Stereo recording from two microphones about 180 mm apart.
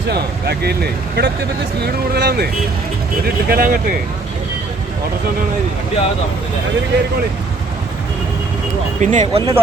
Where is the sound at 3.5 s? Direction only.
55° right (ahead or behind).